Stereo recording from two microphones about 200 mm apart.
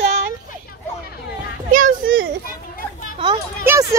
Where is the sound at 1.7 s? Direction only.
40° right (ahead or behind).